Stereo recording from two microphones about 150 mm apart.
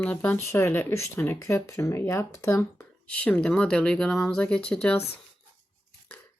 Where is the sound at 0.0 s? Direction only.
10° left (ahead or behind).